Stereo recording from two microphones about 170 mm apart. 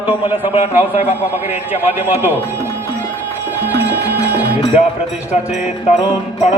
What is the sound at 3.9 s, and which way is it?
Music, 10° right (ahead or behind).